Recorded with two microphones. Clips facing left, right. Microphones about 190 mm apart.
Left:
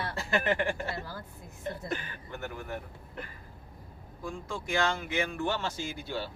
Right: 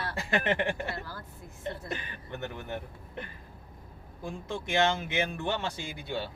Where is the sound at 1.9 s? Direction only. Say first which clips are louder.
Left 1 dB; 20° right (ahead or behind).